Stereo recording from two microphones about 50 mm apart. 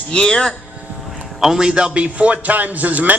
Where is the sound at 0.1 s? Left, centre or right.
Centre.